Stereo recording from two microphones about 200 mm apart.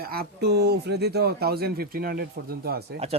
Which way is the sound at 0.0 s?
50° right (ahead or behind).